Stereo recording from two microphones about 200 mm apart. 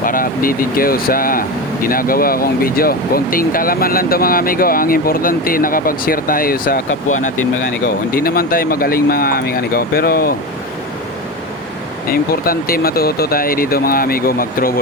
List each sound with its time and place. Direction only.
0.0 s speech: 45° left (ahead or behind)
12.0 s speech: 50° left (ahead or behind)